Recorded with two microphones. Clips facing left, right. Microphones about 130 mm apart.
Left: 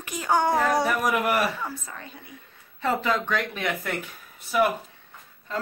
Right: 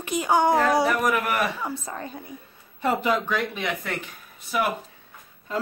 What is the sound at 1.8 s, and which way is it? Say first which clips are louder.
Speech: right 7 dB; 35° right (ahead or behind).